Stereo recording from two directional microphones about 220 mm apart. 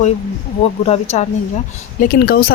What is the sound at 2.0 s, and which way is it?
Speech, 40° left (ahead or behind).